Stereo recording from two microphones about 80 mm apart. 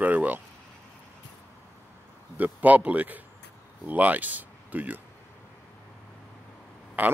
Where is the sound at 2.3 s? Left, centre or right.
Right.